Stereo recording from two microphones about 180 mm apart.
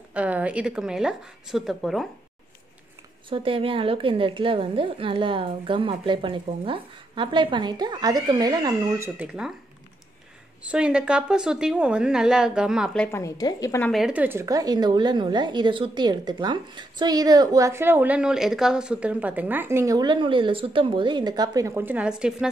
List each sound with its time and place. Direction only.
0.1 s a woman's voice: 5° right (ahead or behind)
3.3 s a woman's voice: 30° right (ahead or behind); by 9.5 s 5° right (ahead or behind)
10.6 s a woman's voice: 5° right (ahead or behind)
13.2 s a woman's voice: 20° left (ahead or behind)
13.9 s a woman's voice: 5° right (ahead or behind)